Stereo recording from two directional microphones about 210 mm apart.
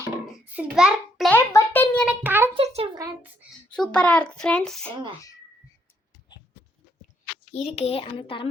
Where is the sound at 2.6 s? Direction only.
25° right (ahead or behind).